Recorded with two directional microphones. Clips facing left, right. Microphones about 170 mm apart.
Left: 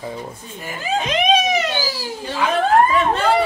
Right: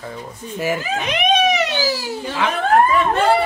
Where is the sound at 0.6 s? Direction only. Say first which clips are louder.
Right 2 dB; 75° right (ahead or behind).